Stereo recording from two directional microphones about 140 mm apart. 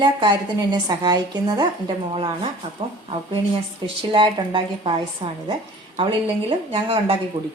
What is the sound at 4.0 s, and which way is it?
Speech, 35° right (ahead or behind).